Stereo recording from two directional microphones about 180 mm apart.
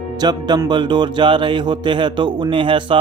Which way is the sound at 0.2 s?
25° right (ahead or behind).